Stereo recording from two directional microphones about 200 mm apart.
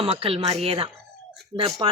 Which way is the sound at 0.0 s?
30° right (ahead or behind).